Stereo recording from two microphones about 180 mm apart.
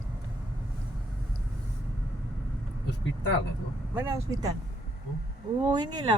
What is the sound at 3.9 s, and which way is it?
Speech, 15° right (ahead or behind).